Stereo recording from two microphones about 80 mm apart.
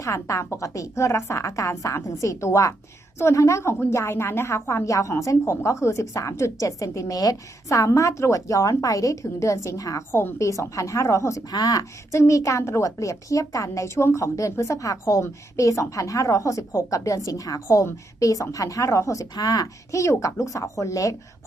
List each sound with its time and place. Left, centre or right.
0.0 s a woman's voice: left
10.1 s a woman's voice: left